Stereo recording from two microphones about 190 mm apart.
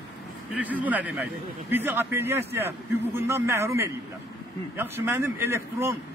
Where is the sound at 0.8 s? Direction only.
10° right (ahead or behind).